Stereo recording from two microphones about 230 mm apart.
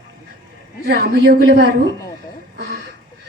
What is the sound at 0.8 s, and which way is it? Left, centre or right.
Speech, right.